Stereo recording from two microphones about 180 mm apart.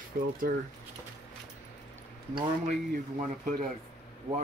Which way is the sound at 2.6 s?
45° right (ahead or behind).